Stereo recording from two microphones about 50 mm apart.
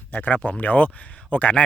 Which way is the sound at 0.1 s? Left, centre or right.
Left.